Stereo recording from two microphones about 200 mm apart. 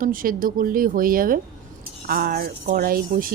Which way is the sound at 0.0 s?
45° right (ahead or behind).